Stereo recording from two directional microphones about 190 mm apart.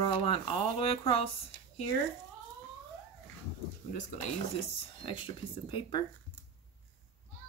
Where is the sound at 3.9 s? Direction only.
40° left (ahead or behind).